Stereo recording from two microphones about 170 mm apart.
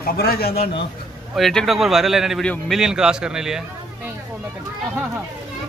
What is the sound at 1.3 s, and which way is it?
A man's voice, centre (ahead or behind).